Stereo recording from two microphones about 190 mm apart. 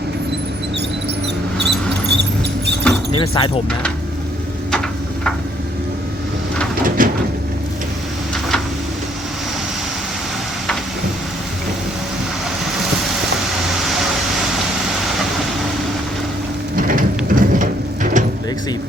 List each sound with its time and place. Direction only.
1.5 s mouse: 65° right (ahead or behind)
3.1 s speech: 25° left (ahead or behind)
6.8 s sliding door: 45° right (ahead or behind)
16.7 s a sound: 45° right (ahead or behind)